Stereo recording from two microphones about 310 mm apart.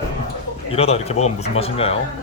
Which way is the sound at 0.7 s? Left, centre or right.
Centre.